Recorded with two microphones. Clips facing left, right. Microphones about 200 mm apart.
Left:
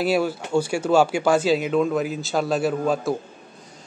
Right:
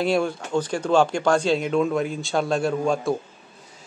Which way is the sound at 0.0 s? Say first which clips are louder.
Left 1 dB; 5° left (ahead or behind).